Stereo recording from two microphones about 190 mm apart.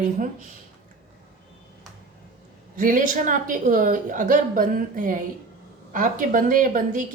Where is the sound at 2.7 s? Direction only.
45° right (ahead or behind).